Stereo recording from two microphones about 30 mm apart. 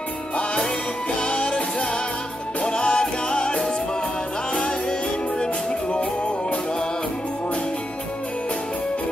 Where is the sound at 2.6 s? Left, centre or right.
Left.